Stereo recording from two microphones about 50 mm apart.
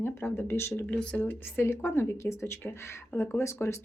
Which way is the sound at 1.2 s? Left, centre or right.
Left.